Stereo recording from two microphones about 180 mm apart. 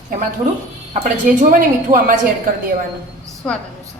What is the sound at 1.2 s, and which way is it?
Speech, 45° right (ahead or behind).